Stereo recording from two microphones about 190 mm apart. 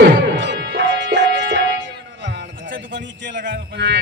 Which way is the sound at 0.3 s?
70° right (ahead or behind).